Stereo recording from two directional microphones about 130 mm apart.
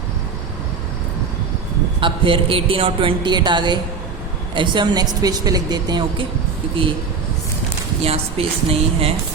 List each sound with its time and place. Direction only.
2.0 s a woman's voice: 40° right (ahead or behind)
8.0 s a woman's voice: 50° right (ahead or behind)